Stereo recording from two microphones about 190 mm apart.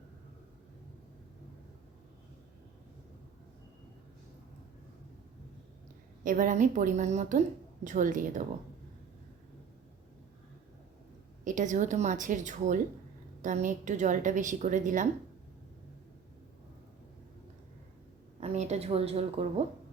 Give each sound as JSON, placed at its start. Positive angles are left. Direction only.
{"t": 6.2, "sound": "a woman's voice", "side_deg": -45}
{"t": 11.4, "sound": "a woman's voice", "side_deg": -40}
{"t": 18.3, "sound": "a woman's voice", "side_deg": -35}